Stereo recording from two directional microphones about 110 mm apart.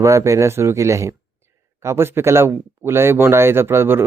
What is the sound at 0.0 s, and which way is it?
Speech, 30° right (ahead or behind).